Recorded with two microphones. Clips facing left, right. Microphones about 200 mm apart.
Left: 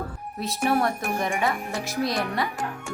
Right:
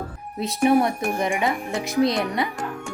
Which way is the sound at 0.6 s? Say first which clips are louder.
Right 5 dB; 15° right (ahead or behind).